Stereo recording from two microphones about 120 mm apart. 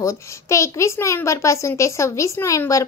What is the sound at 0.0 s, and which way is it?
A woman's voice, 25° left (ahead or behind).